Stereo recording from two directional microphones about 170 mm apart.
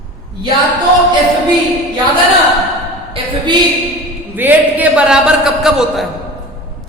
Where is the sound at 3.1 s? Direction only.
30° right (ahead or behind).